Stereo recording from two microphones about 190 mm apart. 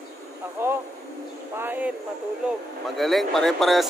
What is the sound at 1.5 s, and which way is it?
Speech, 10° right (ahead or behind).